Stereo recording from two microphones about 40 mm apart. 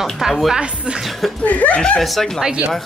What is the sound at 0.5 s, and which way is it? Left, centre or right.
Speech, right.